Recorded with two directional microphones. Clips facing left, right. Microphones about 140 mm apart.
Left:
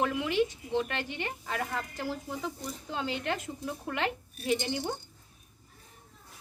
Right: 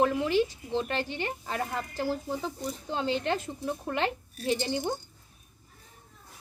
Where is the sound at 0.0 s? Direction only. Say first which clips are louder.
Right 3 dB; 35° right (ahead or behind).